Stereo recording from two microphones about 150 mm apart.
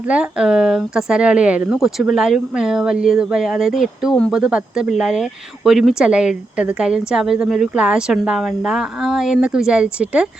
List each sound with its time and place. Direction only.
0.0 s speech: 5° right (ahead or behind)